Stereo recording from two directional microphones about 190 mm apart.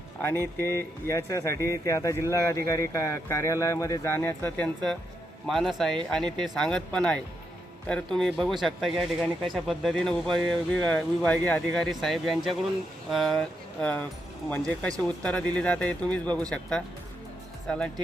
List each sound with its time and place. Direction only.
0.2 s speech: 10° left (ahead or behind)